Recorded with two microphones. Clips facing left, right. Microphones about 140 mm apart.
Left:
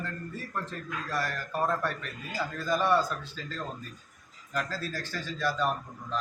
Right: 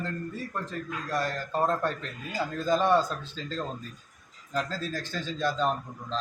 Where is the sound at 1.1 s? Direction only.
20° right (ahead or behind).